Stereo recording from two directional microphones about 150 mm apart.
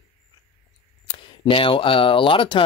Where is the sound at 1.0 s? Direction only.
35° left (ahead or behind).